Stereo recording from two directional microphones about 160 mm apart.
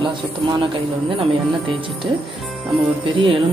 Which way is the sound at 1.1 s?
35° right (ahead or behind).